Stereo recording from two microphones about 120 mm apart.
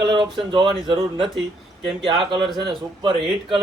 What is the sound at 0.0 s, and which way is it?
Speech, 40° right (ahead or behind).